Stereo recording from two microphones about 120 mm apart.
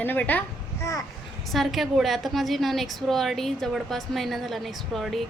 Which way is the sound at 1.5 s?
Centre (ahead or behind).